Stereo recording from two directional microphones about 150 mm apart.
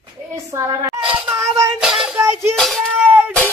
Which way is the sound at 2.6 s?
Centre (ahead or behind).